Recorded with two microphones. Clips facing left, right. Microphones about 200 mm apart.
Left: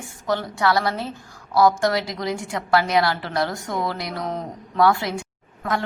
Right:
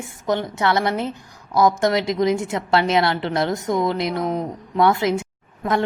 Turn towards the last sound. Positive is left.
turn(degrees=-20)  # may be behind; listen again after turning